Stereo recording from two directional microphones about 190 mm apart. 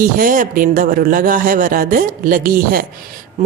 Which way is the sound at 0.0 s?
45° right (ahead or behind).